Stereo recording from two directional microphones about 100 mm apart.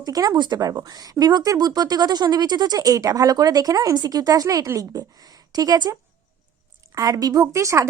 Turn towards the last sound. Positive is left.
turn(degrees=-30)  # may be behind; listen again after turning